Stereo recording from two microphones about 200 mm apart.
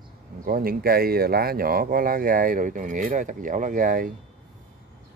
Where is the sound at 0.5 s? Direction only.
50° right (ahead or behind).